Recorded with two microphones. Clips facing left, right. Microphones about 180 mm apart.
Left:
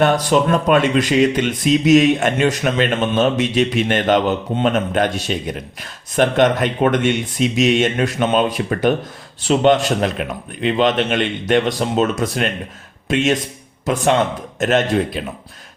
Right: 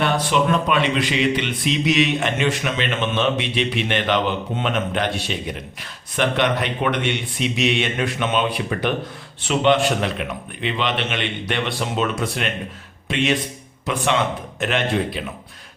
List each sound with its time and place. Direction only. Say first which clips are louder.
0.0 s speech: left 5 dB; 45° left (ahead or behind)